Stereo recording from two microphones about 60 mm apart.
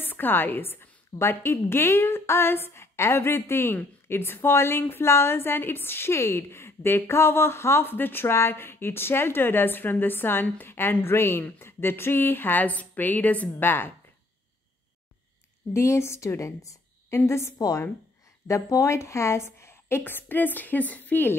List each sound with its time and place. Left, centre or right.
0.0 s a woman's voice: left
15.7 s a woman's voice: left
17.3 s a woman's voice: left
17.6 s a woman's voice: left
18.5 s a woman's voice: left